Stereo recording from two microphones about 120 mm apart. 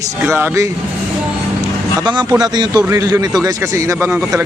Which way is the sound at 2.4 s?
35° right (ahead or behind).